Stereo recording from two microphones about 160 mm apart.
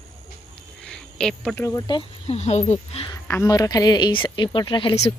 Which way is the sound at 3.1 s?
20° left (ahead or behind).